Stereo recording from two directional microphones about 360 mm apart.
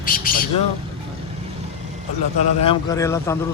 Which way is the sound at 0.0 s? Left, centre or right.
Left.